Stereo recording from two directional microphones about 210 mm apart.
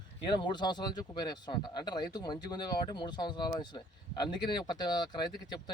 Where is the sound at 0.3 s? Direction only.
20° left (ahead or behind).